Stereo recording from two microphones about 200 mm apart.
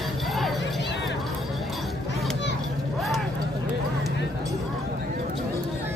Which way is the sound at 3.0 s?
Centre (ahead or behind).